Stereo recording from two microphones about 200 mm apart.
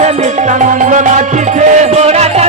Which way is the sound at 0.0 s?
35° right (ahead or behind).